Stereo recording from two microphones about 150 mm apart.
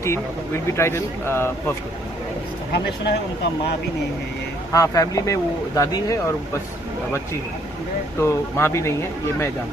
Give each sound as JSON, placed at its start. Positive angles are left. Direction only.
{"t": 0.0, "sound": "speech", "side_deg": 20}
{"t": 2.7, "sound": "speech", "side_deg": 90}
{"t": 4.7, "sound": "speech", "side_deg": 25}
{"t": 8.2, "sound": "speech", "side_deg": 15}